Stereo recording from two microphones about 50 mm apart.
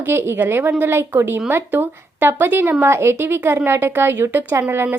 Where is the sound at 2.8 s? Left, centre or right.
Right.